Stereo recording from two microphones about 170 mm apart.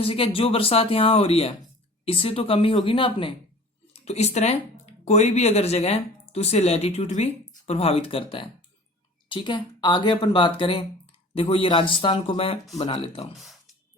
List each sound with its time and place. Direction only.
0.0 s speech: 35° left (ahead or behind)
13.3 s speech: centre (ahead or behind)